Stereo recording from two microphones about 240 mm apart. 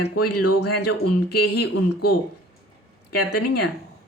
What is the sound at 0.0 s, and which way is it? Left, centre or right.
Speech, left.